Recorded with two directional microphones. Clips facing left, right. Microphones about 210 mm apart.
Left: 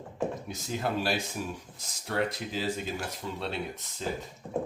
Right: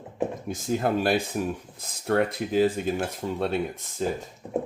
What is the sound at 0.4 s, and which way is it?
Speech, 50° right (ahead or behind).